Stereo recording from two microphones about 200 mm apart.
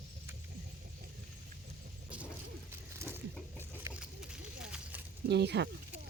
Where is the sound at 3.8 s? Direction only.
5° right (ahead or behind).